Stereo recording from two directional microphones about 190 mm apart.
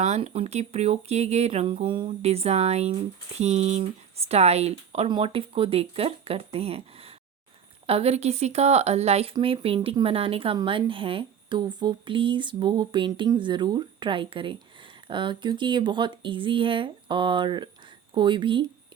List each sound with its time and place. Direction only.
0.0 s speech: 35° right (ahead or behind)